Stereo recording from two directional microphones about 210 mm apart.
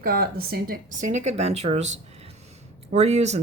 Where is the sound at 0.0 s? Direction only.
45° right (ahead or behind).